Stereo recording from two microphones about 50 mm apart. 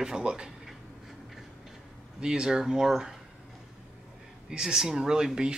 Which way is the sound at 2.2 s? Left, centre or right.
Centre.